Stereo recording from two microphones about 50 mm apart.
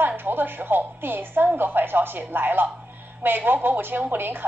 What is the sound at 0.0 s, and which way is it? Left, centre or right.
A woman's voice, right.